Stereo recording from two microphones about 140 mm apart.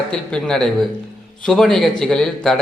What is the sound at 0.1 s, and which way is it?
A man's voice, 5° left (ahead or behind).